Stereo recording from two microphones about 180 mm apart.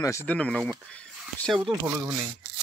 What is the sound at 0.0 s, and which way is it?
Speech, 15° left (ahead or behind).